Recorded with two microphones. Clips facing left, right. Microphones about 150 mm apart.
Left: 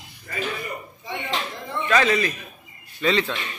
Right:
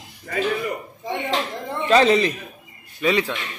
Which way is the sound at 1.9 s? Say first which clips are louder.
Right 5 dB; 30° right (ahead or behind).